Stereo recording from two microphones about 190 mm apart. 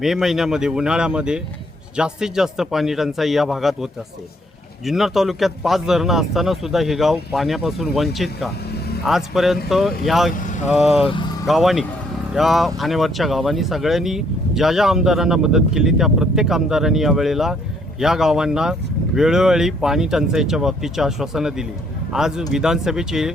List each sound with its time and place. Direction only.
0.0 s speech: centre (ahead or behind)
4.9 s speech: centre (ahead or behind)
10.3 s speech: 45° left (ahead or behind)
10.8 s speech: 5° right (ahead or behind)